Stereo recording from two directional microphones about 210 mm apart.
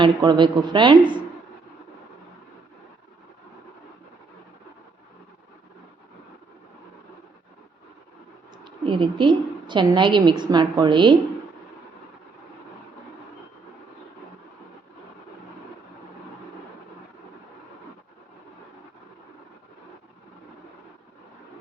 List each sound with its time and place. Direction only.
0.0 s a woman's voice: 20° right (ahead or behind)
8.6 s a woman's voice: 25° right (ahead or behind)